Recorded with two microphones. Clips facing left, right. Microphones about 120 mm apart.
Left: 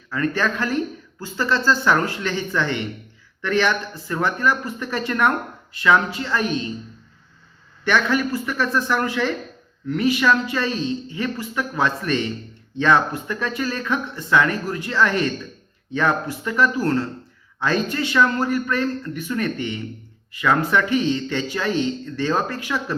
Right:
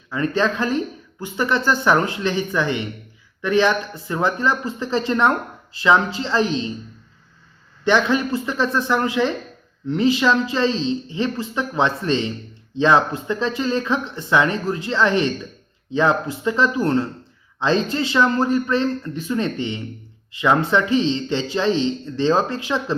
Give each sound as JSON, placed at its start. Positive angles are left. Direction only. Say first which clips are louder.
{"t": 0.1, "sound": "a man's voice", "louder": "right 2 dB", "side_deg": -20}
{"t": 7.9, "sound": "a man's voice", "louder": "right 2 dB", "side_deg": -20}